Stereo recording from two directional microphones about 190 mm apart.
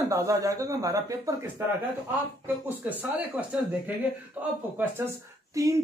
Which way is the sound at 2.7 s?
10° right (ahead or behind).